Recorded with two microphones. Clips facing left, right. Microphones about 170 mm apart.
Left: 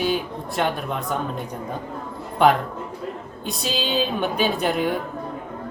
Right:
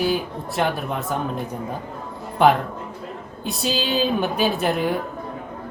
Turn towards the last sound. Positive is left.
turn(degrees=0)  # may be behind; listen again after turning